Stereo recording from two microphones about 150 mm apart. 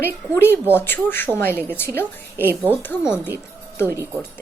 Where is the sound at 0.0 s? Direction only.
15° left (ahead or behind).